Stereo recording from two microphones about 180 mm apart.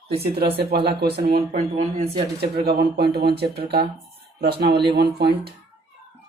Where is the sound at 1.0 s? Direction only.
65° right (ahead or behind).